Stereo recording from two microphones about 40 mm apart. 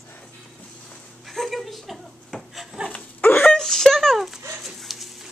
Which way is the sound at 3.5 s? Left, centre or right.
Centre.